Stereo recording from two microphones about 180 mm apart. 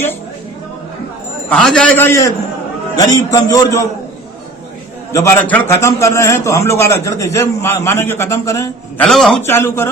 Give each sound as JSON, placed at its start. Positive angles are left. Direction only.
{"t": 1.5, "sound": "a man's voice", "side_deg": 5}
{"t": 5.1, "sound": "a man's voice", "side_deg": 15}
{"t": 9.0, "sound": "a man's voice", "side_deg": 5}
{"t": 9.5, "sound": "a man's voice", "side_deg": 15}